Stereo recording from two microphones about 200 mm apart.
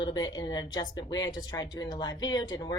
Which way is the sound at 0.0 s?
20° left (ahead or behind).